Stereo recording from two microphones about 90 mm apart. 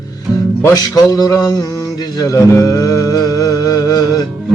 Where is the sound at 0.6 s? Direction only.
45° left (ahead or behind).